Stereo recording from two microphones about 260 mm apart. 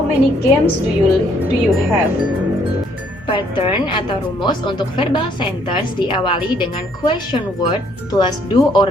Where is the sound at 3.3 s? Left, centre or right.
Centre.